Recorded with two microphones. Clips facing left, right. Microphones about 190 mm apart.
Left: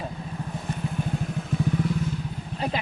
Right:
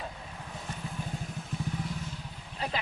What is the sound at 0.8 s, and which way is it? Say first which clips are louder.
Vehicle: left 10 dB; 70° left (ahead or behind).